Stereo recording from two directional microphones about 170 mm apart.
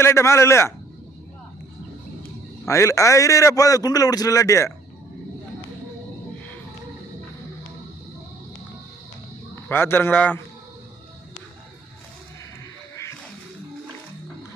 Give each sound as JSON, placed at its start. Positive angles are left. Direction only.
{"t": 0.0, "sound": "a man's voice", "side_deg": 15}
{"t": 2.6, "sound": "a man's voice", "side_deg": 15}
{"t": 9.7, "sound": "a man's voice", "side_deg": 10}